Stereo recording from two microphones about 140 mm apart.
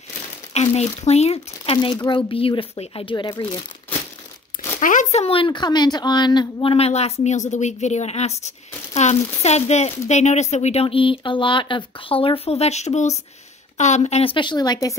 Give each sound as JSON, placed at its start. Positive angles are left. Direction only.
{"t": 0.6, "sound": "a woman's voice", "side_deg": 50}
{"t": 2.0, "sound": "speech", "side_deg": 35}
{"t": 4.7, "sound": "speech", "side_deg": 60}
{"t": 5.2, "sound": "a woman's voice", "side_deg": 40}